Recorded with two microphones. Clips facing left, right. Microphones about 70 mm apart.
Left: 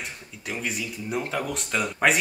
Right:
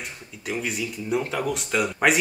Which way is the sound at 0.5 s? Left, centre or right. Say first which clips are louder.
Right 3 dB; centre.